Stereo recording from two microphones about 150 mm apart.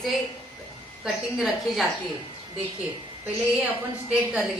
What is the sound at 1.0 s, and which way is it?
Speech, centre (ahead or behind).